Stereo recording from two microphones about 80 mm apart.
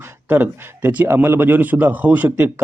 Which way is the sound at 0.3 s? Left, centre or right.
Right.